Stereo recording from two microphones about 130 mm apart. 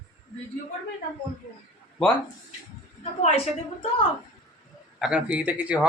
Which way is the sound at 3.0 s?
50° left (ahead or behind).